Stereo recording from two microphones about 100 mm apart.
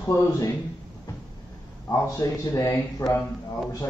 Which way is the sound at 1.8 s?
30° left (ahead or behind).